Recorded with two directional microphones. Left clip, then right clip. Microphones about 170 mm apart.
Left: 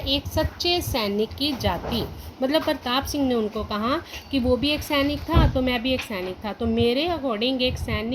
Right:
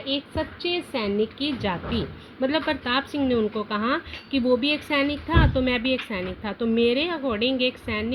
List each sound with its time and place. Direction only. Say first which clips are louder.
0.7 s a woman's voice: even; 35° right (ahead or behind)